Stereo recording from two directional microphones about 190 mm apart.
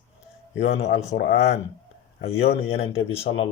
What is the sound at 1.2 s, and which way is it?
Speech, 65° left (ahead or behind).